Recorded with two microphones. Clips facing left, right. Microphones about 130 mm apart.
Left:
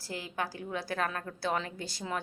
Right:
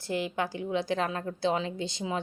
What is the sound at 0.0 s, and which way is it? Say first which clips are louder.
A woman's voice: right 6 dB; 25° right (ahead or behind).